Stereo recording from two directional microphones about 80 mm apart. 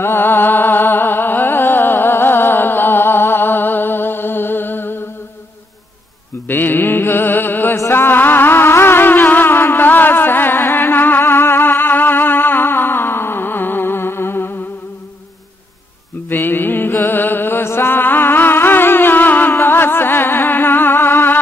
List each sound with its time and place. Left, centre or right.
0.0 s music: left
6.4 s mantra: left
7.7 s music: left
16.3 s mantra: left
19.5 s music: left